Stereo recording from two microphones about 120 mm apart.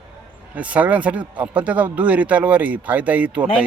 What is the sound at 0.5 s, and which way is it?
Speech, 10° right (ahead or behind).